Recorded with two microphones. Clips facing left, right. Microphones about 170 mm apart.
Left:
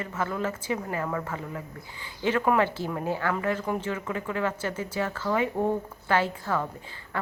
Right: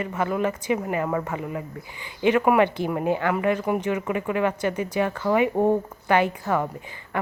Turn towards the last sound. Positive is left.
turn(degrees=-15)  # may be behind; listen again after turning